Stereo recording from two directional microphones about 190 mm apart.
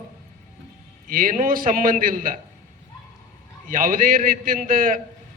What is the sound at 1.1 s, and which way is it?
A man's voice, 45° right (ahead or behind).